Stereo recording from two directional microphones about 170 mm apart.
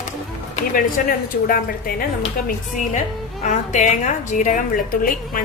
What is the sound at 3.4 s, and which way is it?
A woman's voice, 45° left (ahead or behind).